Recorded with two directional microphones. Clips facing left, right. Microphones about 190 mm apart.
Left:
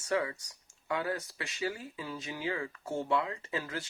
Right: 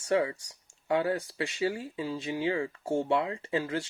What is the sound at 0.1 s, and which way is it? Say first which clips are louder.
Speech: right 5 dB; 30° right (ahead or behind).